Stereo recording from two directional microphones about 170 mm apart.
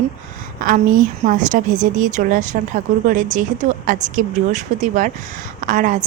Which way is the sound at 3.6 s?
50° right (ahead or behind).